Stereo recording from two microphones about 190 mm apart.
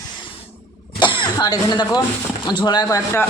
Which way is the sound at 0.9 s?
25° left (ahead or behind).